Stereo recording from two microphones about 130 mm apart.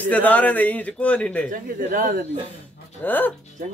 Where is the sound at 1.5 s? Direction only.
90° right.